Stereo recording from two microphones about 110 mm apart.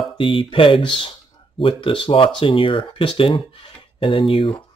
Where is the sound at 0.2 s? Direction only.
50° left (ahead or behind).